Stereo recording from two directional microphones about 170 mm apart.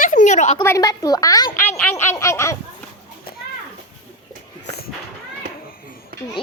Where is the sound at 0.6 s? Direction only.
20° left (ahead or behind).